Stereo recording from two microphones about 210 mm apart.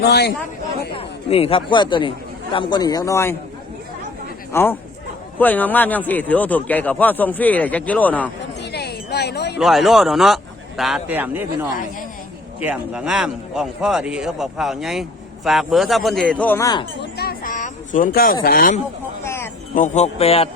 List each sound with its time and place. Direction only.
0.0 s speech: 50° left (ahead or behind)
0.9 s speech: 25° left (ahead or behind)
4.5 s speech: 10° left (ahead or behind)
8.7 s a sound: 50° left (ahead or behind)
9.6 s a man's voice: centre (ahead or behind); by 16.8 s 15° left (ahead or behind)
17.0 s a sound: 50° left (ahead or behind)
18.4 s speech: 40° left (ahead or behind)
19.2 s a sound: 10° left (ahead or behind)
19.7 s speech: 35° left (ahead or behind)